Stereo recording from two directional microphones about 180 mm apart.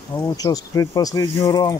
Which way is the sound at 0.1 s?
20° left (ahead or behind).